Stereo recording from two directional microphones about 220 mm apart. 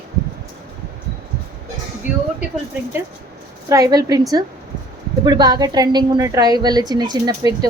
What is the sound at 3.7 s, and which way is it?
A woman's voice, 15° right (ahead or behind).